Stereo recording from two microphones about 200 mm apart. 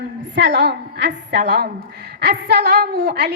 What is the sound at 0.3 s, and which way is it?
A woman's voice, 60° right (ahead or behind).